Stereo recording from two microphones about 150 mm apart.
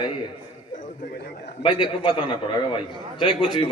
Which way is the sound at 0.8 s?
65° left (ahead or behind).